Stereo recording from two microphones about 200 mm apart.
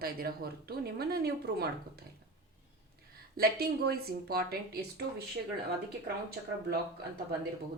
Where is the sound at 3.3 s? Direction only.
50° right (ahead or behind).